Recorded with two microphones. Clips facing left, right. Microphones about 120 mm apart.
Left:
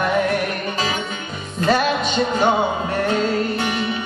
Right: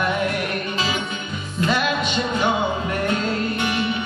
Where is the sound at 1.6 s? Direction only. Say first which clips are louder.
Left 4 dB; 40° left (ahead or behind).